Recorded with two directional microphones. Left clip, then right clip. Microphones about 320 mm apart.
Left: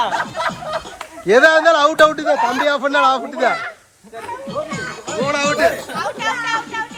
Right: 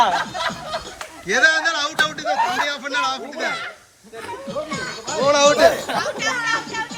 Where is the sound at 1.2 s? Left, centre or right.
Centre.